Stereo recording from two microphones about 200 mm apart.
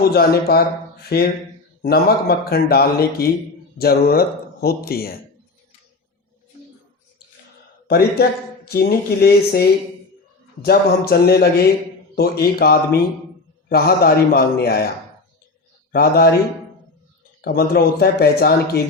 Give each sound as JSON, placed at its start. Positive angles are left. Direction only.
{"t": 0.0, "sound": "speech", "side_deg": 50}
{"t": 7.9, "sound": "speech", "side_deg": 50}
{"t": 15.9, "sound": "speech", "side_deg": 50}
{"t": 17.4, "sound": "speech", "side_deg": 50}